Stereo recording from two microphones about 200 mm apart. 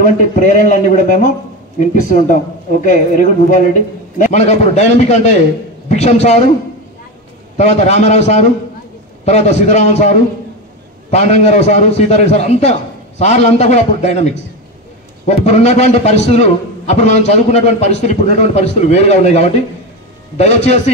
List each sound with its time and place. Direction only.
0.0 s a man's voice: 40° left (ahead or behind)
7.5 s a man's voice: 35° left (ahead or behind)